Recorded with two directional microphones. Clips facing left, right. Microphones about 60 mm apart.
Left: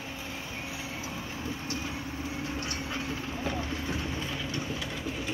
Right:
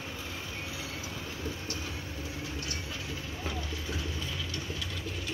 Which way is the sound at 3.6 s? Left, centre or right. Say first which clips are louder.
Left 4 dB; left.